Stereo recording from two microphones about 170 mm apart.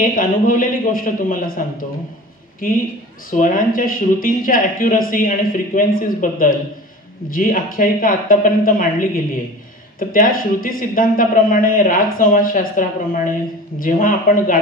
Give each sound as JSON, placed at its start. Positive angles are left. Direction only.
{"t": 0.0, "sound": "a man's voice", "side_deg": 55}